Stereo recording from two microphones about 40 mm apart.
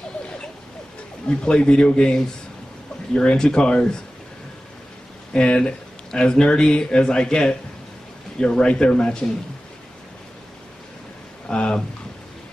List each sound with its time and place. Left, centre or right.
1.2 s speech: left
3.2 s speech: left
5.3 s speech: left
8.5 s speech: centre
11.4 s speech: left